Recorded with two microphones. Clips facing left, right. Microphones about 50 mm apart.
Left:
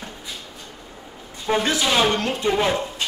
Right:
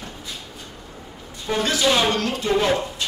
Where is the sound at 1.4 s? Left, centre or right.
Left.